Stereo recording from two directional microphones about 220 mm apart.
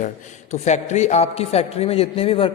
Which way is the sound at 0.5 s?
30° left (ahead or behind).